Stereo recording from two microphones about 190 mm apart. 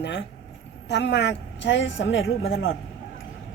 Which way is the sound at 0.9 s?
65° left (ahead or behind).